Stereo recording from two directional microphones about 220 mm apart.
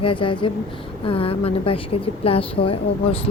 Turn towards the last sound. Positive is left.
turn(degrees=25)  # may be behind; listen again after turning